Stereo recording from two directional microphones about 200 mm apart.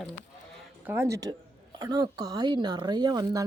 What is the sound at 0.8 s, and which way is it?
A woman's voice, 15° right (ahead or behind).